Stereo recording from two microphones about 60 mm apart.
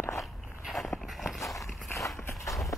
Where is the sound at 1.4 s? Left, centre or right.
Left.